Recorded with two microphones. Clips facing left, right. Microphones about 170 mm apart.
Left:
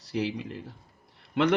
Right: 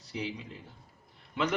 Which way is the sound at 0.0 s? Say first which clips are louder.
Left 7 dB; 75° left (ahead or behind).